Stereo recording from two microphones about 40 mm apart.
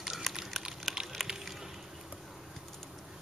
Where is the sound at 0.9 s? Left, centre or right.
Centre.